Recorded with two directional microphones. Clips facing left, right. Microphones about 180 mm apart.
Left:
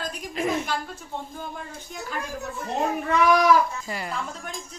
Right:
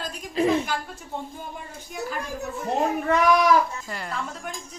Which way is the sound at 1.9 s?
10° right (ahead or behind).